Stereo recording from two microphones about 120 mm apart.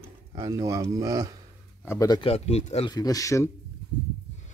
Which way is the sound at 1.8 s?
30° left (ahead or behind).